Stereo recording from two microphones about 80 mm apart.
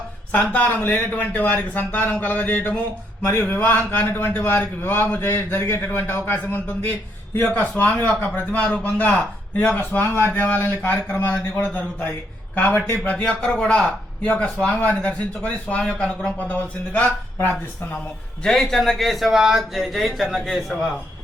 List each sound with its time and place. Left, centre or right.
0.5 s a man's voice: left
18.4 s speech: centre